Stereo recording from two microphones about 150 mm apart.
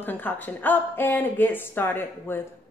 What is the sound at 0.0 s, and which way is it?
Speech, 10° left (ahead or behind).